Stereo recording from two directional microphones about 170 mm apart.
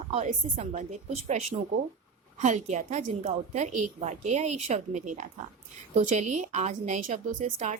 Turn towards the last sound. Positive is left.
turn(degrees=-50)  # may be behind; listen again after turning